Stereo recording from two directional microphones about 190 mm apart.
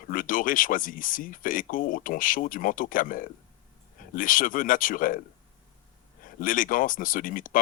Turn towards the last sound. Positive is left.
turn(degrees=45)  # may be behind; listen again after turning